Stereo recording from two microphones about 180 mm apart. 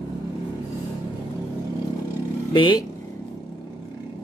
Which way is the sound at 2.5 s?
25° left (ahead or behind).